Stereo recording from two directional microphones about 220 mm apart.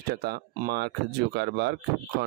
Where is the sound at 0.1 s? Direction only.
45° right (ahead or behind).